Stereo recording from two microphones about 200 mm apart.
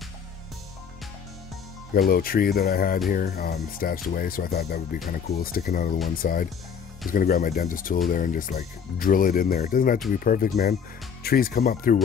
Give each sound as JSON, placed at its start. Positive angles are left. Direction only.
{"t": 2.0, "sound": "speech", "side_deg": 50}